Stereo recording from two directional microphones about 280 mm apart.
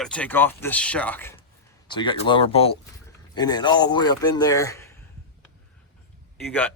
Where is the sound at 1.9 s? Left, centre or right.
Centre.